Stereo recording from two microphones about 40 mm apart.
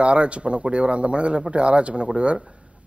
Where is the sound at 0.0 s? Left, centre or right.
Right.